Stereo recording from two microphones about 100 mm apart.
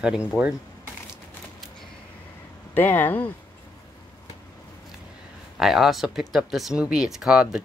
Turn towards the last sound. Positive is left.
turn(degrees=-5)  # may be behind; listen again after turning